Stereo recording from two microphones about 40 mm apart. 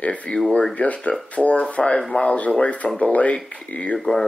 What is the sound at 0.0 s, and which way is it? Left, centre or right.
Speech, left.